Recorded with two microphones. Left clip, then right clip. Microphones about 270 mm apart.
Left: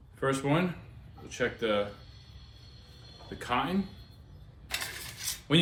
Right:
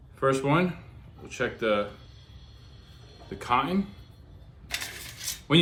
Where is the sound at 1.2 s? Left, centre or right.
Centre.